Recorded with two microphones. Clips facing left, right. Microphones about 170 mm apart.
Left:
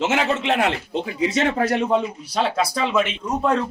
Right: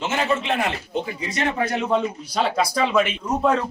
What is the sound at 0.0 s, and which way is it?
Speech, 90° left.